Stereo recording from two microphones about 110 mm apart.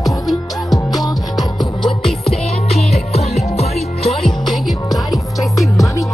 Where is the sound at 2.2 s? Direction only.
70° left (ahead or behind).